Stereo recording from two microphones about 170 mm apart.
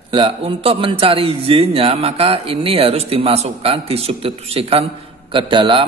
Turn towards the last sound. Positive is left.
turn(degrees=-30)  # may be behind; listen again after turning